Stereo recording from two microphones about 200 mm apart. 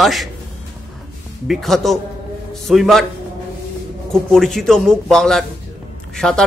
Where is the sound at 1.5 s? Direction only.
Centre (ahead or behind).